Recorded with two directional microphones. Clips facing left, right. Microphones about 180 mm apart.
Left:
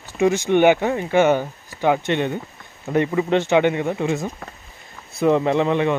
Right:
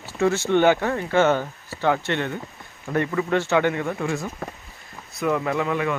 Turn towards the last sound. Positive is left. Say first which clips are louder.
# left 5 dB
turn(degrees=25)  # may be behind; listen again after turning